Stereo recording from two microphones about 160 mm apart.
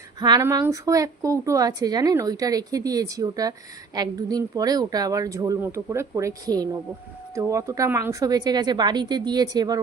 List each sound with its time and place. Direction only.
0.2 s a woman's voice: 25° right (ahead or behind)